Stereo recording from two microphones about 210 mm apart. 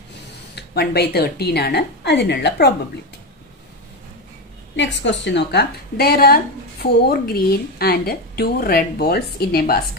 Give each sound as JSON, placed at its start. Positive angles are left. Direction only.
{"t": 0.6, "sound": "a woman's voice", "side_deg": 50}
{"t": 4.7, "sound": "a woman's voice", "side_deg": 60}